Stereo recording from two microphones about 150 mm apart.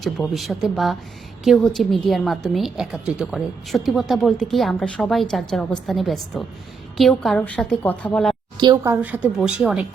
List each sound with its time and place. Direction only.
0.0 s a woman's voice: centre (ahead or behind)
8.5 s a woman's voice: 25° right (ahead or behind)
9.0 s speech: 10° right (ahead or behind)